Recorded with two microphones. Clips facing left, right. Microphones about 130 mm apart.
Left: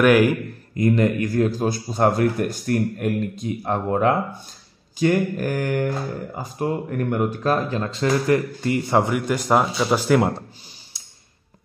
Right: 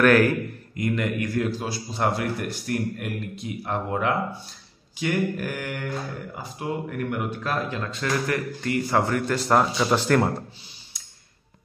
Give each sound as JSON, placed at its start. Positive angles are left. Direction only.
{"t": 0.0, "sound": "speech", "side_deg": 10}
{"t": 0.7, "sound": "a man's voice", "side_deg": 35}